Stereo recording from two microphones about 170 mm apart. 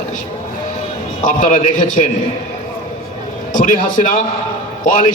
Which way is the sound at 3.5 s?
50° left (ahead or behind).